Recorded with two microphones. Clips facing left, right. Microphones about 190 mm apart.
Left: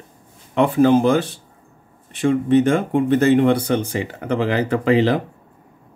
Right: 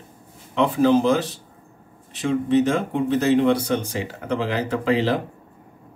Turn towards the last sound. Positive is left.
turn(degrees=60)  # may be behind; listen again after turning